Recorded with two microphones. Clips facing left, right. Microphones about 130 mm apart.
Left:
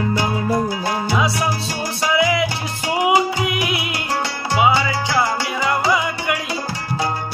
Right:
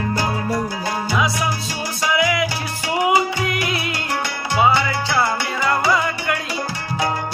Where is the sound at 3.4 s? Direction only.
15° left (ahead or behind).